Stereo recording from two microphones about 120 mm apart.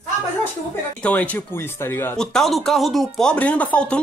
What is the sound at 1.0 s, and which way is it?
Speech, 10° left (ahead or behind).